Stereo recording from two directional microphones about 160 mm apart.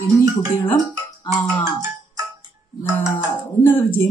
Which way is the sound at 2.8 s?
15° left (ahead or behind).